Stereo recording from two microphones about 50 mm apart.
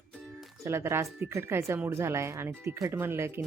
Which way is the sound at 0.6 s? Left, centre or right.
Right.